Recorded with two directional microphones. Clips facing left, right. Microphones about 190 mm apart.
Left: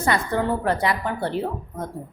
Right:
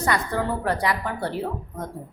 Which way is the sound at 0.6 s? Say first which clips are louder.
Left 2 dB; 25° left (ahead or behind).